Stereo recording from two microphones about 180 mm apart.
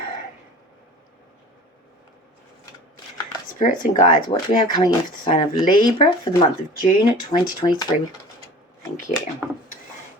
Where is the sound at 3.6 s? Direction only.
45° left (ahead or behind).